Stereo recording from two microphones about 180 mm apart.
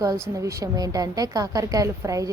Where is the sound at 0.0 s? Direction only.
20° right (ahead or behind).